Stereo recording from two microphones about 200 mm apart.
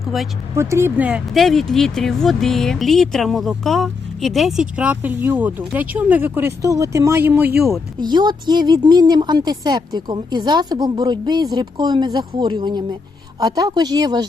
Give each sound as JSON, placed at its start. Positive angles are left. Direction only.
{"t": 0.0, "sound": "speech", "side_deg": 0}
{"t": 0.5, "sound": "speech", "side_deg": -15}
{"t": 7.9, "sound": "a woman's voice", "side_deg": -20}